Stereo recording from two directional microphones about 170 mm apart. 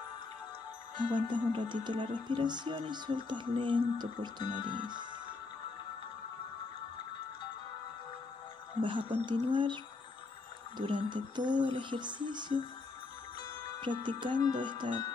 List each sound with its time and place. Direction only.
0.9 s speech: 30° right (ahead or behind)
8.8 s speech: 30° right (ahead or behind)
10.8 s speech: 30° right (ahead or behind)
13.7 s speech: 30° right (ahead or behind)